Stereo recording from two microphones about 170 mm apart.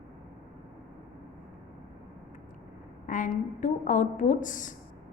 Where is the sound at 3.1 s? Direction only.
50° left (ahead or behind).